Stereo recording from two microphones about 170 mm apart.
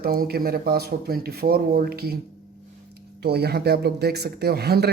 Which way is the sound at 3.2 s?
70° right (ahead or behind).